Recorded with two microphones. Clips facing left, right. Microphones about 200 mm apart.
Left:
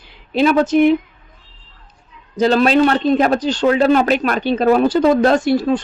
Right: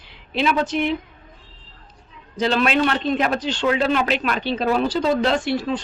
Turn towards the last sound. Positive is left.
turn(degrees=45)  # may be behind; listen again after turning